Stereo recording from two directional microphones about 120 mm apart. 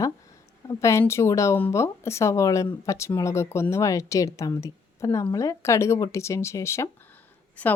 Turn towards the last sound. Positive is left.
turn(degrees=15)  # may be behind; listen again after turning